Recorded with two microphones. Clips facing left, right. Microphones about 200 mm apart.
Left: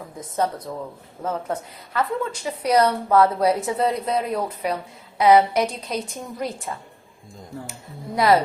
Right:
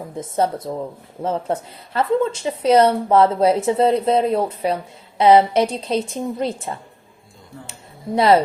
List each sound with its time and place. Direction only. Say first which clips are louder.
0.2 s a woman's voice: right 4 dB; 30° right (ahead or behind)